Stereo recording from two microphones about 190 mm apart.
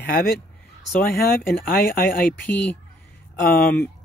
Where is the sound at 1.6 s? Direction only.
50° left (ahead or behind).